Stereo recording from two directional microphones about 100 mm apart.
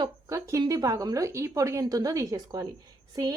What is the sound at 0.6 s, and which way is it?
A woman's voice, 40° right (ahead or behind).